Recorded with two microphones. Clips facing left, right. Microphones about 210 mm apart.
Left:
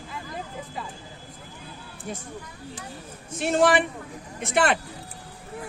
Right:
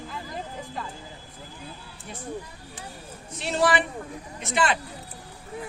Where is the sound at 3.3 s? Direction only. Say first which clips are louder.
Left 3 dB; 50° left (ahead or behind).